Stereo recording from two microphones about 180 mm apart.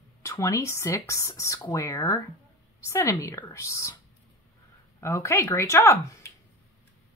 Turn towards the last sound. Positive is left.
turn(degrees=15)  # may be behind; listen again after turning